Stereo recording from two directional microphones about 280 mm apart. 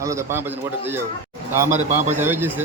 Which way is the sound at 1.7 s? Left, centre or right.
Right.